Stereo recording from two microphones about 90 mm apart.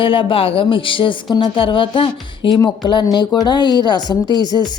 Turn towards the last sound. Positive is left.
turn(degrees=50)  # may be behind; listen again after turning